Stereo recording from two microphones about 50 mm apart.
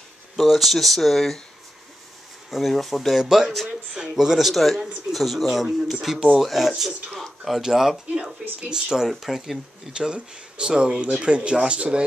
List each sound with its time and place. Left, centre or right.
0.4 s speech: centre
2.5 s speech: centre
9.9 s speech: centre